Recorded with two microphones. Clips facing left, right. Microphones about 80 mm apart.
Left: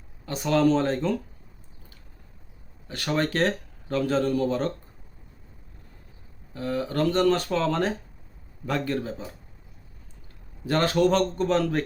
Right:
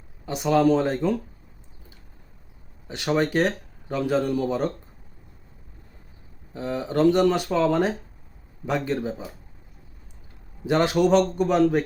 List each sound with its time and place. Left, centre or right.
0.3 s speech: centre
2.8 s speech: centre
6.5 s speech: right
10.7 s speech: centre